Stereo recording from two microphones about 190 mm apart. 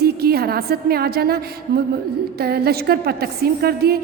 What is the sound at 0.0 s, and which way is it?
A woman's voice, 55° right (ahead or behind).